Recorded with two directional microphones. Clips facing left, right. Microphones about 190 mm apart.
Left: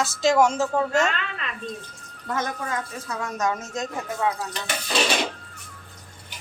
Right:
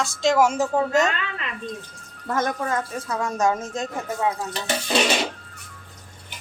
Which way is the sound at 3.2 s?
30° right (ahead or behind).